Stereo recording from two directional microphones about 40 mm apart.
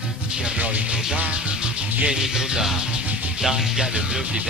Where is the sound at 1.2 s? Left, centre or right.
Right.